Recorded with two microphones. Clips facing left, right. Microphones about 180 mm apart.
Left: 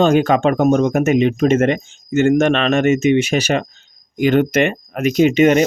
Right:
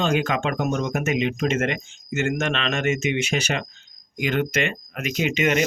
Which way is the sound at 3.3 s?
40° left (ahead or behind).